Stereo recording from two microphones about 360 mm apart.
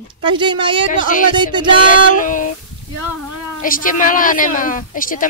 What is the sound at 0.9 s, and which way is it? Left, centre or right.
Speech, left.